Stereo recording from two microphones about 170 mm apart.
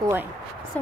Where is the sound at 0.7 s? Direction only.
10° left (ahead or behind).